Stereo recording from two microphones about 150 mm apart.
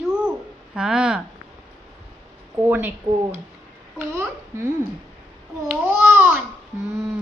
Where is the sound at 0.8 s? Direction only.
5° right (ahead or behind).